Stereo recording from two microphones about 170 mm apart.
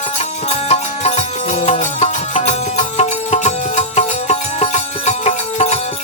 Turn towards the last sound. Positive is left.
turn(degrees=40)  # may be behind; listen again after turning